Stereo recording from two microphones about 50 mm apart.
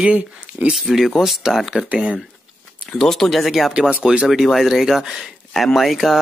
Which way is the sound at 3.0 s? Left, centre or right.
Centre.